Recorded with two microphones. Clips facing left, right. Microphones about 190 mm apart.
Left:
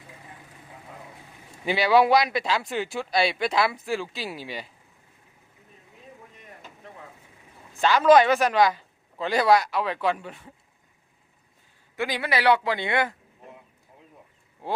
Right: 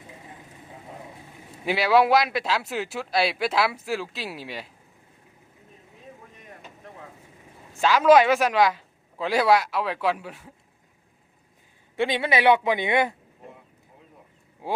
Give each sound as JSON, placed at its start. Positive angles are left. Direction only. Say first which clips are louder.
{"t": 1.5, "sound": "speech", "louder": "even", "side_deg": 0}
{"t": 7.8, "sound": "speech", "louder": "even", "side_deg": -5}
{"t": 11.9, "sound": "speech", "louder": "right 3 dB", "side_deg": -25}
{"t": 14.6, "sound": "speech", "louder": "right 1 dB", "side_deg": -10}